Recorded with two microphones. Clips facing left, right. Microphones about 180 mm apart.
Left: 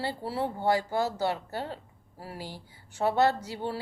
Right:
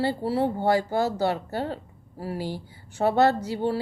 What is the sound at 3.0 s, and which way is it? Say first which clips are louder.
Speech: right 4 dB; 55° right (ahead or behind).